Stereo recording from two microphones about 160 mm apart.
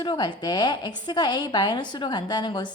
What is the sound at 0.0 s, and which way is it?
A woman's voice, 30° left (ahead or behind).